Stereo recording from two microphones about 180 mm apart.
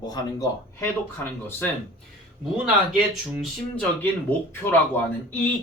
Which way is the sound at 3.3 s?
5° left (ahead or behind).